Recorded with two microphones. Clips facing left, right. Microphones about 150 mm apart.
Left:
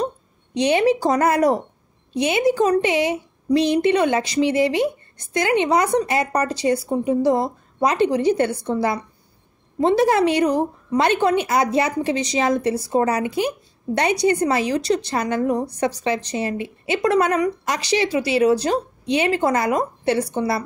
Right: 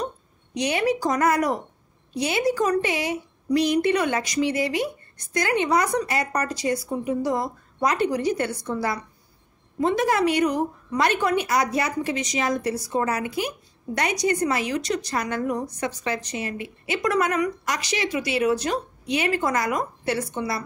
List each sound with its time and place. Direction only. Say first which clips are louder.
0.6 s a woman's voice: left 6 dB; 25° left (ahead or behind)